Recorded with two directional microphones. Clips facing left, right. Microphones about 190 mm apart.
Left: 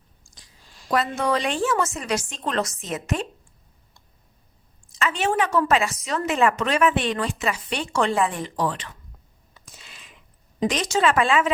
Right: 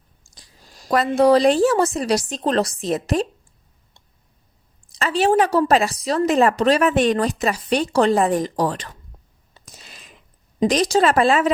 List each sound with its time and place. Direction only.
0.3 s speech: 40° right (ahead or behind)
4.9 s speech: 35° right (ahead or behind)
9.6 s a sound: 40° right (ahead or behind)
10.7 s speech: 35° right (ahead or behind)